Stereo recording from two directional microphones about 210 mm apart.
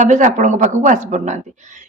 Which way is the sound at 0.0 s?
35° right (ahead or behind).